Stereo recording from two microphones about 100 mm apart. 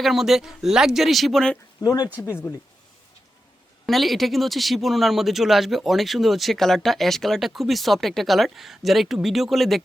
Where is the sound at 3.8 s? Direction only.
Centre (ahead or behind).